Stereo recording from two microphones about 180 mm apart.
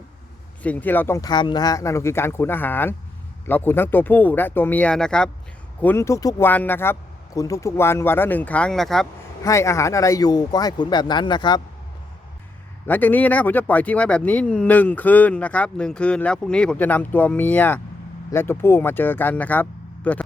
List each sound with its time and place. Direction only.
0.6 s speech: 10° left (ahead or behind)
9.4 s speech: 15° left (ahead or behind)
12.9 s speech: 10° left (ahead or behind)